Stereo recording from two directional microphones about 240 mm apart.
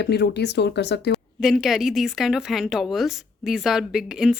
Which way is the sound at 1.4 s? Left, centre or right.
Centre.